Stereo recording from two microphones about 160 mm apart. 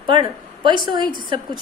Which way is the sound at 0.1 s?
30° right (ahead or behind).